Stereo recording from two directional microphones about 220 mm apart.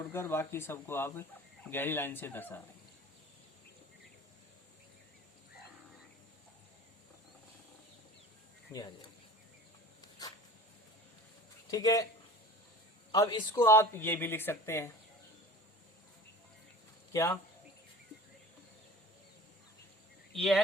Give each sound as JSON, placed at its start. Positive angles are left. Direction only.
{"t": 0.1, "sound": "speech", "side_deg": 10}
{"t": 8.7, "sound": "speech", "side_deg": 15}
{"t": 10.0, "sound": "dog", "side_deg": 15}
{"t": 11.7, "sound": "speech", "side_deg": 15}
{"t": 13.1, "sound": "speech", "side_deg": 20}
{"t": 17.1, "sound": "speech", "side_deg": 10}
{"t": 20.3, "sound": "speech", "side_deg": 0}